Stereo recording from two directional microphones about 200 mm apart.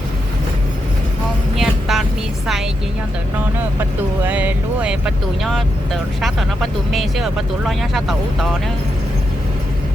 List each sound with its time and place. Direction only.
1.5 s vehicle: centre (ahead or behind)
3.8 s speech: 10° right (ahead or behind)